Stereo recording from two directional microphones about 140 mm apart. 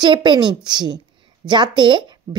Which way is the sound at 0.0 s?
35° right (ahead or behind).